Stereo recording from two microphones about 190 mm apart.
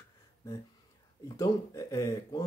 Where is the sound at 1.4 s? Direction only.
15° left (ahead or behind).